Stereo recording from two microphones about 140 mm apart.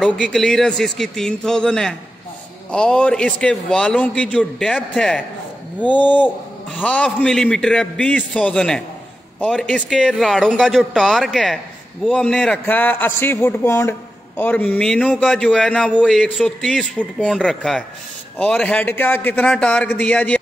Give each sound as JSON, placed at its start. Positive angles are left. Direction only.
{"t": 0.0, "sound": "a man's voice", "side_deg": 5}